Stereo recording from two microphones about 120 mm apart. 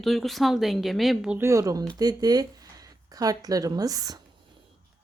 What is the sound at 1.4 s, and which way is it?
Speech, 25° right (ahead or behind).